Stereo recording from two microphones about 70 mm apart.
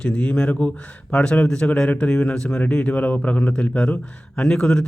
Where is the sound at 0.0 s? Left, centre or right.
Centre.